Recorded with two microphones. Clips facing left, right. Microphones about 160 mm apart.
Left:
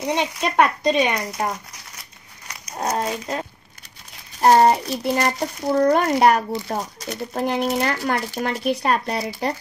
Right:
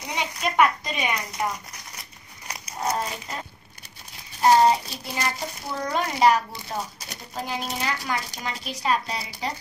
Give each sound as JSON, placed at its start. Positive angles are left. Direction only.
{"t": 0.0, "sound": "speech", "side_deg": 70}
{"t": 2.8, "sound": "speech", "side_deg": 55}
{"t": 4.4, "sound": "speech", "side_deg": 55}